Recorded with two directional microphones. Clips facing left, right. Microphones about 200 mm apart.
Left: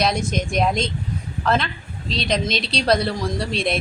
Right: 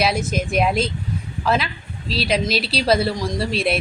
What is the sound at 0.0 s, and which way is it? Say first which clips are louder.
A woman's voice: right 1 dB; 5° right (ahead or behind).